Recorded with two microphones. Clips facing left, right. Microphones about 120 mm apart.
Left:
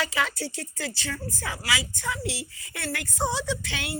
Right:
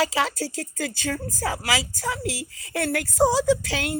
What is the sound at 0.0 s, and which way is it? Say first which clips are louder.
Speech: right 5 dB; 35° right (ahead or behind).